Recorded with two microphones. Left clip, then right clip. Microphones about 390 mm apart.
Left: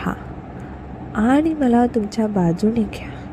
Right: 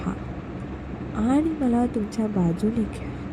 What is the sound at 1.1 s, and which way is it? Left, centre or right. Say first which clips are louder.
Speech: left 6 dB; centre.